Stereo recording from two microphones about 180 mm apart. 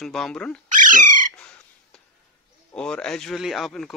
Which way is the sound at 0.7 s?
45° right (ahead or behind).